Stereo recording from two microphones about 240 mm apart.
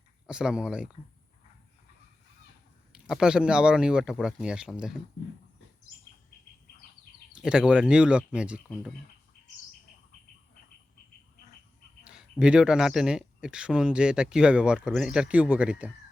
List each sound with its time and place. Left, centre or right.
0.3 s speech: centre
2.9 s speech: centre
7.4 s speech: centre
12.0 s speech: centre